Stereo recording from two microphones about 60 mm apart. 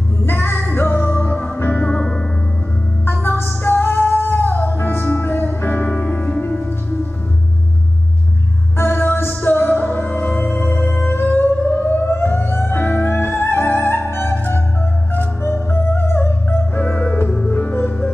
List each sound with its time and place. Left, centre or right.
0.2 s music: left; by 2.2 s centre
3.1 s music: left
5.9 s music: centre
6.4 s music: left
8.7 s music: left
11.2 s music: left